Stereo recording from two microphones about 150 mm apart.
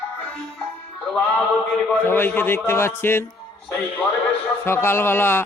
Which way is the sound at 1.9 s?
10° left (ahead or behind).